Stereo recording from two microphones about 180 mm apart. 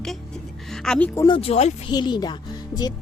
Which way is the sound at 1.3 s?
30° left (ahead or behind).